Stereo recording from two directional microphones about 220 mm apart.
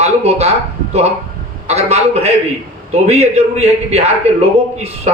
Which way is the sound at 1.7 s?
30° right (ahead or behind).